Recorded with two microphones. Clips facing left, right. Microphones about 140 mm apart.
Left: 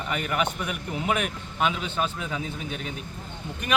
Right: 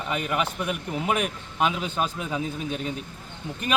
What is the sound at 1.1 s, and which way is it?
Speech, 35° right (ahead or behind).